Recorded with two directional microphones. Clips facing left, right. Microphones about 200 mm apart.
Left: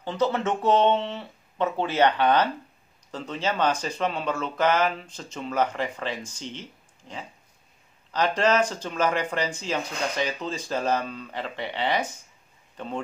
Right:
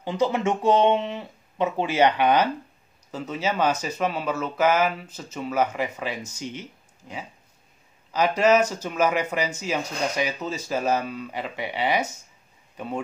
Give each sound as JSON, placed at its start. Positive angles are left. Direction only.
{"t": 0.0, "sound": "speech", "side_deg": -10}
{"t": 8.1, "sound": "speech", "side_deg": -10}